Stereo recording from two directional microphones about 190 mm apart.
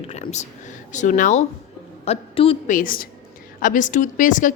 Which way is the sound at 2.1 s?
30° left (ahead or behind).